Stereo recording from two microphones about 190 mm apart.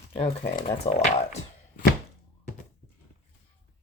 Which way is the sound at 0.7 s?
35° left (ahead or behind).